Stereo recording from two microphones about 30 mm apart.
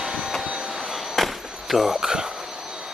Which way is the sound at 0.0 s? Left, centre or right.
Centre.